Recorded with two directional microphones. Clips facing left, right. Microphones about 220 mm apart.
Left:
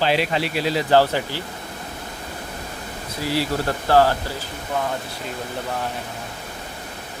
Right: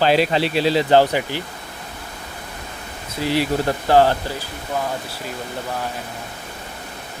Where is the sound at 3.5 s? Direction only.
20° right (ahead or behind).